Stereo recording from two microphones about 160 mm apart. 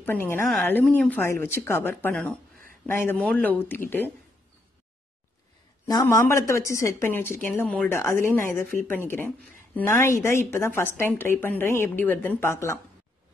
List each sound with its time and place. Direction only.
0.0 s a woman's voice: 15° left (ahead or behind)
5.9 s a woman's voice: 20° left (ahead or behind)